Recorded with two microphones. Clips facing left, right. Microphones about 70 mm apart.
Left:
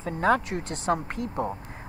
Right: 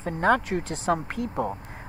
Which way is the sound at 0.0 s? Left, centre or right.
Right.